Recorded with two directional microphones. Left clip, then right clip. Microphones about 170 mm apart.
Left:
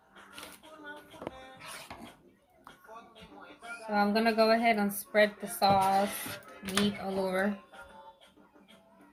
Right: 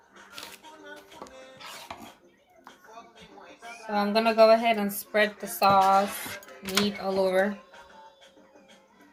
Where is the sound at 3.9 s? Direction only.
30° right (ahead or behind).